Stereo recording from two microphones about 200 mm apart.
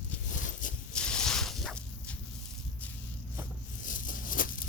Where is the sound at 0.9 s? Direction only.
5° left (ahead or behind).